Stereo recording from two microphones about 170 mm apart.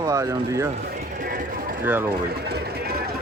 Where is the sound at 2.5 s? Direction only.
70° right (ahead or behind).